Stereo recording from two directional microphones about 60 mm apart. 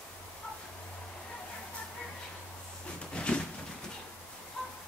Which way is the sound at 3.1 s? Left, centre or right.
Centre.